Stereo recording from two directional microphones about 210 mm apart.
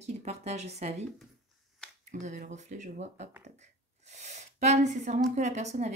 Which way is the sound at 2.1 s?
35° right (ahead or behind).